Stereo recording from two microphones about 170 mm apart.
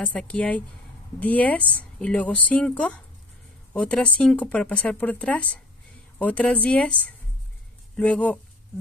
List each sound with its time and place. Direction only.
0.0 s speech: 10° left (ahead or behind)